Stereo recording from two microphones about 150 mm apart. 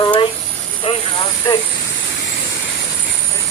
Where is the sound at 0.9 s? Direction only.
40° left (ahead or behind).